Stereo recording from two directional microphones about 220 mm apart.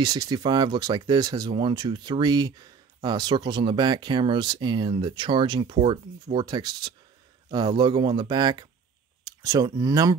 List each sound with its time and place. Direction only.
0.0 s speech: 20° right (ahead or behind)